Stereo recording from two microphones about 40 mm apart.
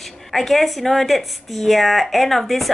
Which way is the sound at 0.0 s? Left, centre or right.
Centre.